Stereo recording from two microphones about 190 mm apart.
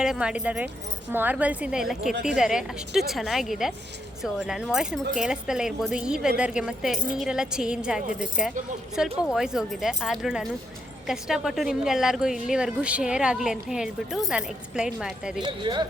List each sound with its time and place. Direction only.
0.0 s a woman's voice: 5° right (ahead or behind)
15.4 s speech: 25° right (ahead or behind)